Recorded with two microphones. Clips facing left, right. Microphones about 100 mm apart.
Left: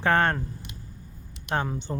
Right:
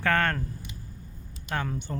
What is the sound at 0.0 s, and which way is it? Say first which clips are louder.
Speech: left 3 dB; 20° left (ahead or behind).